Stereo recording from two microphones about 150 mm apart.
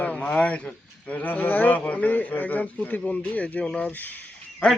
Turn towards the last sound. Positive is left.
turn(degrees=10)  # may be behind; listen again after turning